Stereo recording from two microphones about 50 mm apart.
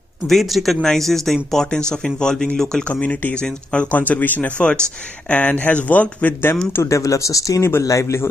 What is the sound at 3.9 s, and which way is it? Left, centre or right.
Speech, left.